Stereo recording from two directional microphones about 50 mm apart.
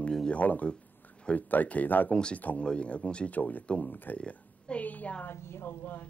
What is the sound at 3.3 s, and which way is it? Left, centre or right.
Speech, left.